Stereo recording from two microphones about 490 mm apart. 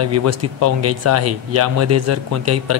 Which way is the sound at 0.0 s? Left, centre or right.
Right.